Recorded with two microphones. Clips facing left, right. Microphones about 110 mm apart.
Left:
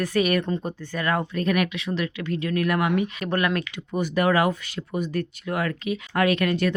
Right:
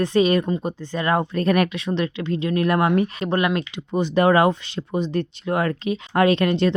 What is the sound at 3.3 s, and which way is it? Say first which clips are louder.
Speech: right 3 dB; 20° right (ahead or behind).